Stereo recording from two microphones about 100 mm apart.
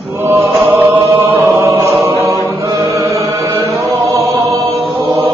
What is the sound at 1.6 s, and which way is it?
Chant, 30° right (ahead or behind).